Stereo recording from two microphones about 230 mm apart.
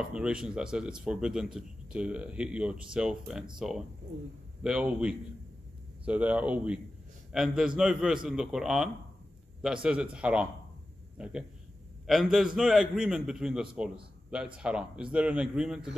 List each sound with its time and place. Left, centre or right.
0.0 s a man's voice: centre